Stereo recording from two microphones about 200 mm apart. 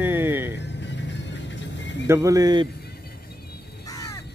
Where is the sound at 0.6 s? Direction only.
60° left (ahead or behind).